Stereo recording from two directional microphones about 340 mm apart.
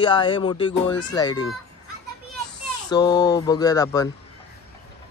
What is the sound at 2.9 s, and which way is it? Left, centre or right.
Speech, centre.